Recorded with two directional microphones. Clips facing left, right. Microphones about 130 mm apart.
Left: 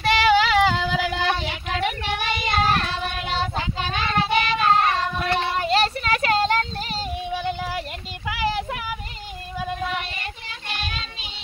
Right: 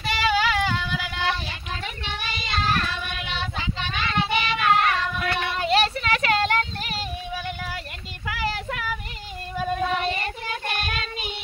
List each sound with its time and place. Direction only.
0.0 s child singing: 90° left; by 8.9 s 20° left (ahead or behind)
9.9 s child singing: 40° right (ahead or behind)